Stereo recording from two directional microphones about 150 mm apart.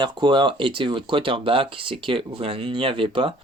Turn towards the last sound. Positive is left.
turn(degrees=-35)  # may be behind; listen again after turning